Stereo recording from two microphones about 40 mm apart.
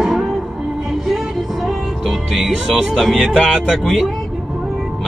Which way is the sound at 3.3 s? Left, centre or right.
Left.